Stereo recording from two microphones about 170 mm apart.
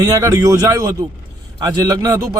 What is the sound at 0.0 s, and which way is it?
Speech, 20° right (ahead or behind).